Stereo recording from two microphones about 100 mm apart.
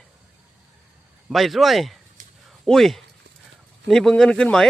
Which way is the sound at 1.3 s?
Centre (ahead or behind).